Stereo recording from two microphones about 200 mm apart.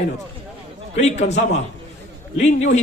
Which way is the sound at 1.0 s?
35° left (ahead or behind).